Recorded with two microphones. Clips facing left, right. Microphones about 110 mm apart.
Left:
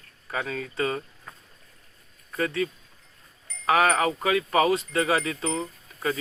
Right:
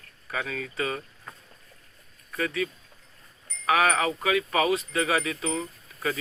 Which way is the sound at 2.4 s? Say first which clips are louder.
Left 2 dB; 30° left (ahead or behind).